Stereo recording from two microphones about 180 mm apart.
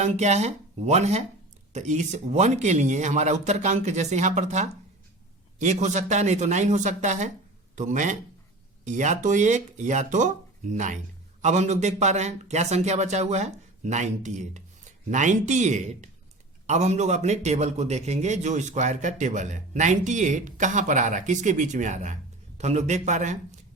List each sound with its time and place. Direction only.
0.0 s a man's voice: 40° right (ahead or behind)